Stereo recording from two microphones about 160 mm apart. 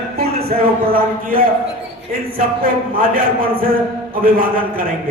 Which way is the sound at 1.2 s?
65° right (ahead or behind).